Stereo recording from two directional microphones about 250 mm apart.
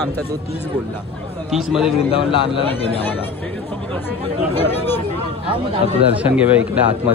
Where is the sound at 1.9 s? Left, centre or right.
Left.